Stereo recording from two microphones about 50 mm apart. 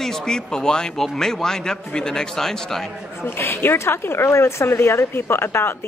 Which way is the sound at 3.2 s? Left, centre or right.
Left.